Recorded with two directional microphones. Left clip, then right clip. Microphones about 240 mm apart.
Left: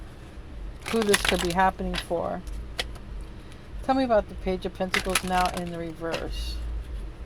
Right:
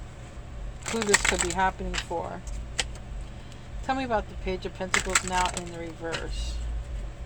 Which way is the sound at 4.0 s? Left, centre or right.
Left.